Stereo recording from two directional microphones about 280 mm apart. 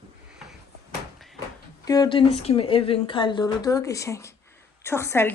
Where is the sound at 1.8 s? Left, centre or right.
Centre.